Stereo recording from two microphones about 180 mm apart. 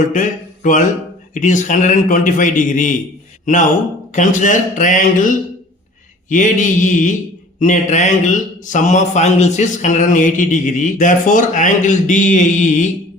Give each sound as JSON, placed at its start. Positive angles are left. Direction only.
{"t": 0.1, "sound": "speech", "side_deg": 45}
{"t": 4.1, "sound": "speech", "side_deg": 45}